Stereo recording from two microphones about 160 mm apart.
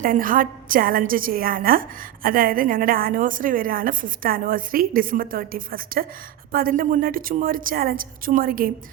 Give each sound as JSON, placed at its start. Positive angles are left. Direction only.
{"t": 0.0, "sound": "a woman's voice", "side_deg": -60}